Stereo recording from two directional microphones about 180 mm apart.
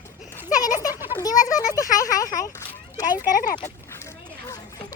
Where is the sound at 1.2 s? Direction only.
20° left (ahead or behind).